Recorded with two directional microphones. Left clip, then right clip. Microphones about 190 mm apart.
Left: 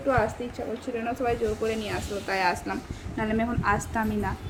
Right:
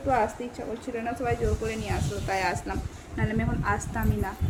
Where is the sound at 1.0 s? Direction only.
Centre (ahead or behind).